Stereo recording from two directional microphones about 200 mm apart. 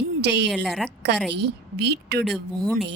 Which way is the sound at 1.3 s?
55° right (ahead or behind).